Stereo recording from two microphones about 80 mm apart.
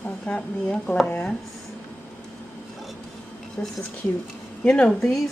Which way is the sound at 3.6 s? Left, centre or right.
Left.